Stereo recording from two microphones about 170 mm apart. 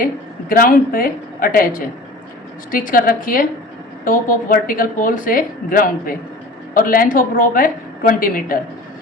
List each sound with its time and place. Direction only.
0.0 s a woman's voice: 55° left (ahead or behind)
2.7 s speech: 55° left (ahead or behind)